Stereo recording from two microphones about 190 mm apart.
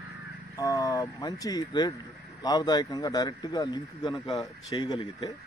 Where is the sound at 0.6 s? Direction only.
20° left (ahead or behind).